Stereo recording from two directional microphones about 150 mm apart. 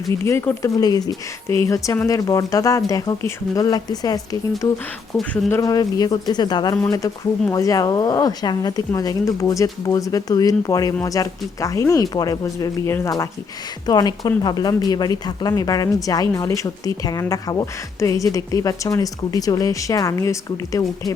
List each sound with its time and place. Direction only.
0.3 s a woman's voice: 20° left (ahead or behind)
5.1 s speech: centre (ahead or behind)
5.5 s a woman's voice: 20° left (ahead or behind)